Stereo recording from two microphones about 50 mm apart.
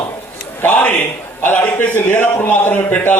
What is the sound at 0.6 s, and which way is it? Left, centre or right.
Speech, left.